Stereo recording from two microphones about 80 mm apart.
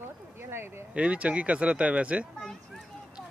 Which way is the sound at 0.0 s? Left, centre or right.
Right.